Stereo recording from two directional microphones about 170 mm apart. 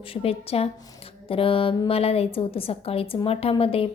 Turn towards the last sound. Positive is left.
turn(degrees=35)  # may be behind; listen again after turning